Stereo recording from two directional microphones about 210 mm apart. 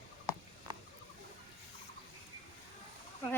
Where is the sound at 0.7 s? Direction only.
20° right (ahead or behind).